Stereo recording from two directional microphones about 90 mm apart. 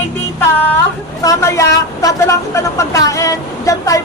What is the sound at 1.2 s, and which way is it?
A woman's voice, 35° left (ahead or behind).